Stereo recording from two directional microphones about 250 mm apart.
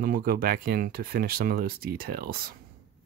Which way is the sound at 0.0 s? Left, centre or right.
Right.